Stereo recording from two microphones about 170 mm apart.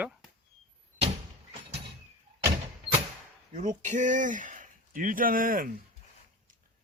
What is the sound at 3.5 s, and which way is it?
Speech, 45° right (ahead or behind).